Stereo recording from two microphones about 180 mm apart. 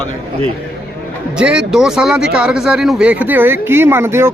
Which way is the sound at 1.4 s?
5° right (ahead or behind).